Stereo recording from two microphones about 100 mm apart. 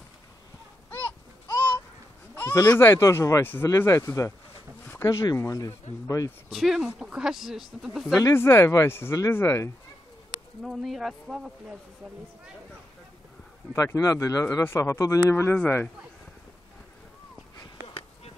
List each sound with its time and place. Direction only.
0.8 s a sound: 20° left (ahead or behind)
2.7 s a man's voice: 25° left (ahead or behind)
6.5 s speech: 5° right (ahead or behind)
8.1 s speech: 35° left (ahead or behind)
10.6 s speech: centre (ahead or behind)
13.9 s a man's voice: 35° left (ahead or behind)